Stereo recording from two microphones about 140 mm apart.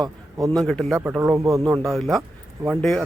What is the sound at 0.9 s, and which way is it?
Speech, 15° right (ahead or behind).